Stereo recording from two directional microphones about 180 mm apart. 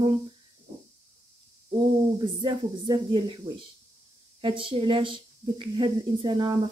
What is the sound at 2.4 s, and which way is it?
Speech, 25° right (ahead or behind).